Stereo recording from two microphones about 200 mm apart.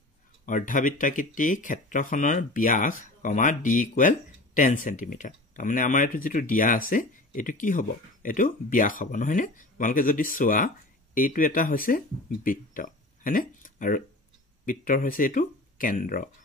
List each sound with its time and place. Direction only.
0.5 s speech: 40° left (ahead or behind)